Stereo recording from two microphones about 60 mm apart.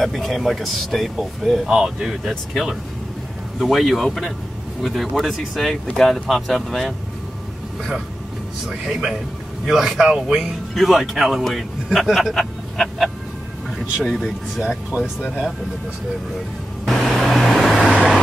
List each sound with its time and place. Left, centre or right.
0.0 s speech: centre
8.6 s speech: centre
10.7 s a man's voice: centre
14.9 s speech: right
16.8 s vehicle: centre